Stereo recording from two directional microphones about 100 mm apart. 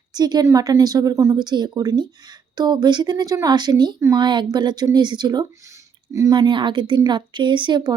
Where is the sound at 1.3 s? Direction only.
45° right (ahead or behind).